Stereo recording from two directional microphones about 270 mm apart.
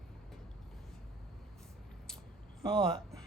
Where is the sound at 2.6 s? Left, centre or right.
Centre.